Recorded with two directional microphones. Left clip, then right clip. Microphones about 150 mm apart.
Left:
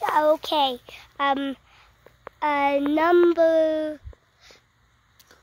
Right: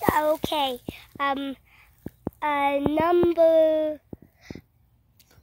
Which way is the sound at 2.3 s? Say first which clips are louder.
Left 2 dB; 20° left (ahead or behind).